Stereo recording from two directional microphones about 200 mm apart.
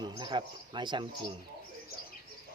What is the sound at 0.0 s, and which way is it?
Speech, 20° right (ahead or behind).